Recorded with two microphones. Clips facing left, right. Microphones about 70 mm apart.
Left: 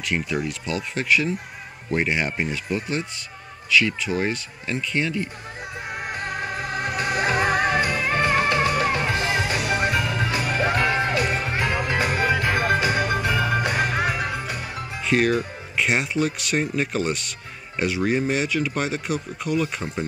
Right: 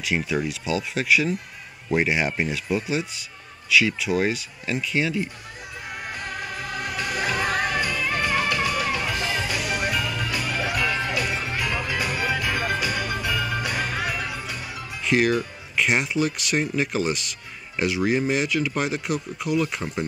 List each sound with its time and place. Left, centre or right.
0.0 s speech: centre
5.9 s music: left
15.0 s speech: centre